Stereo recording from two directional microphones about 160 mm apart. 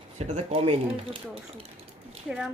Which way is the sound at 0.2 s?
40° right (ahead or behind).